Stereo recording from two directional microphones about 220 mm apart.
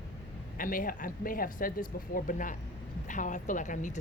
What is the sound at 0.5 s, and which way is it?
A woman's voice, 40° left (ahead or behind).